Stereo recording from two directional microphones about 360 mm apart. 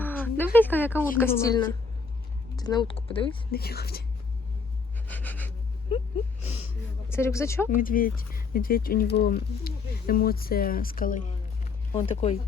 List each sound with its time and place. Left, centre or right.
0.0 s speech: centre
3.6 s speech: left
5.0 s a sound: centre
7.1 s speech: centre
7.8 s speech: left
11.6 s a sound: centre